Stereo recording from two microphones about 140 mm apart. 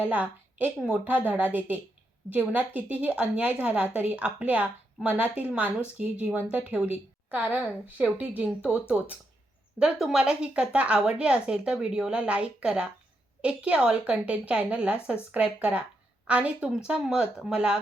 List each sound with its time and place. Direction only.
0.0 s a woman's voice: 10° right (ahead or behind)